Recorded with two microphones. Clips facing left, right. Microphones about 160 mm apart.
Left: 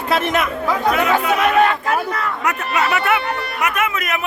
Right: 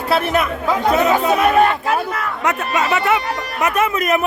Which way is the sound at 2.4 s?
25° right (ahead or behind).